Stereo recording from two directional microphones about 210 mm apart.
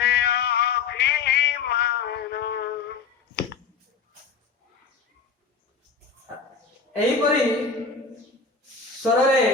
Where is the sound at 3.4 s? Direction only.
50° left (ahead or behind).